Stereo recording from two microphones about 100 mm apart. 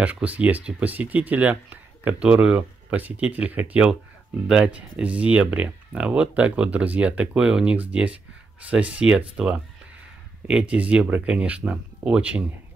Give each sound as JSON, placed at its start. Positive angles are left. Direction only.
{"t": 0.0, "sound": "speech", "side_deg": -15}